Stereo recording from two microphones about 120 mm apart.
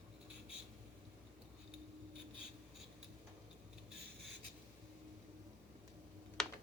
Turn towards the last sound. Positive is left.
turn(degrees=5)  # may be behind; listen again after turning